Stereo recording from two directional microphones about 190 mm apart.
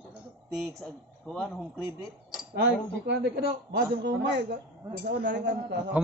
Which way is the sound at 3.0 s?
65° right (ahead or behind).